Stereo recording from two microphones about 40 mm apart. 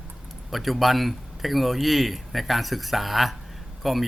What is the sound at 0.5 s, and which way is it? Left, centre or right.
Speech, centre.